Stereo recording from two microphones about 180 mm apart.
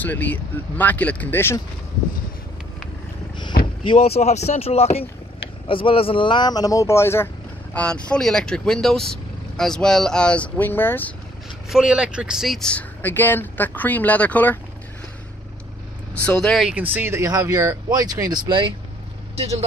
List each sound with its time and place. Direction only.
0.0 s speech: 10° left (ahead or behind)
4.1 s speech: 40° left (ahead or behind); by 11.1 s 10° left (ahead or behind)
11.7 s speech: 5° right (ahead or behind)
16.3 s speech: 5° left (ahead or behind); by 18.7 s 25° right (ahead or behind)
19.3 s speech: 35° right (ahead or behind)